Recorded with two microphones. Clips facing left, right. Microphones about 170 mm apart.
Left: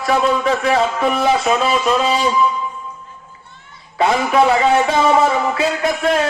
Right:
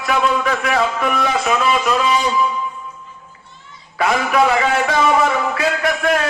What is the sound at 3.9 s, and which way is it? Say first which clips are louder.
A man's voice: left 2 dB; 25° left (ahead or behind).